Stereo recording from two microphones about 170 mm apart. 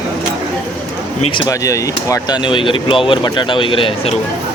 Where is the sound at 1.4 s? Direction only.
20° left (ahead or behind).